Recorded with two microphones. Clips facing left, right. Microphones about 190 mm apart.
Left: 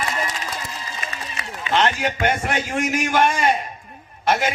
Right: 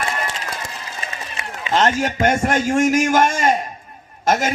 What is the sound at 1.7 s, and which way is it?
A man's voice, 40° right (ahead or behind).